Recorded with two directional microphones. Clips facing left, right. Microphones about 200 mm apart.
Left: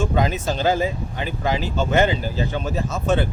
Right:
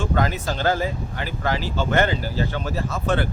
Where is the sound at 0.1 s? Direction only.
15° left (ahead or behind).